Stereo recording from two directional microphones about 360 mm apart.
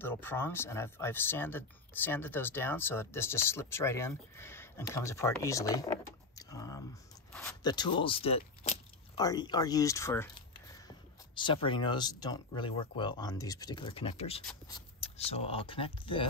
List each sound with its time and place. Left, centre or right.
0.0 s speech: centre
6.3 s a sound: centre
7.3 s speech: centre
14.4 s speech: centre
15.0 s speech: centre